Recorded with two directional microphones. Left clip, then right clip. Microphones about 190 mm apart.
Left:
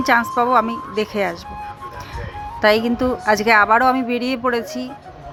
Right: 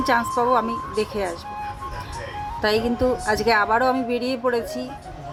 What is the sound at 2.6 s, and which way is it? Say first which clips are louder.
Speech: left 5 dB; 15° left (ahead or behind).